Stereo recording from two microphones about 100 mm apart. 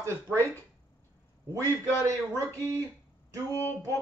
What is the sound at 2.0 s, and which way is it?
Speech, 35° right (ahead or behind).